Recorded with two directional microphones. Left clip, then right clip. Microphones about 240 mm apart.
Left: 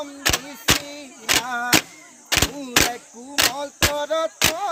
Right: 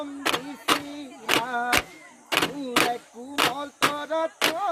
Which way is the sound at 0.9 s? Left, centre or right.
Left.